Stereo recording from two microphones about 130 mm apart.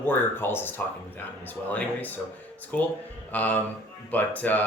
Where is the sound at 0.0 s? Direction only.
15° left (ahead or behind).